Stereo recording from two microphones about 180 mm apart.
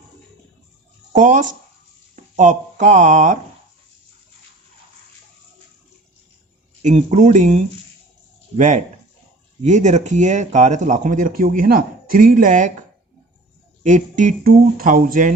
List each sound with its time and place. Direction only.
1.1 s speech: 45° right (ahead or behind)
6.8 s speech: 40° right (ahead or behind)
13.8 s speech: 45° right (ahead or behind)